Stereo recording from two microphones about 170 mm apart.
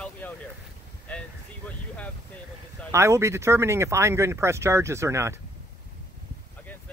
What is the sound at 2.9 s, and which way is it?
Speech, 15° right (ahead or behind).